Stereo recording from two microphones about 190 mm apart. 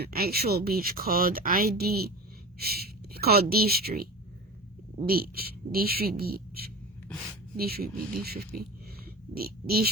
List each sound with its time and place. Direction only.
0.0 s speech: 55° right (ahead or behind)
5.0 s speech: 50° right (ahead or behind)